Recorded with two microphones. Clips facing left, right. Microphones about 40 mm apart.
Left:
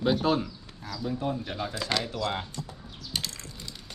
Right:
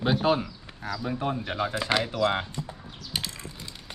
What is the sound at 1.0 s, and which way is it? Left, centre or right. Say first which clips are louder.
Speech: even; right.